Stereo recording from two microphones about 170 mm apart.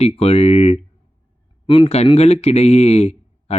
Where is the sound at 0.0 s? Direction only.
35° left (ahead or behind).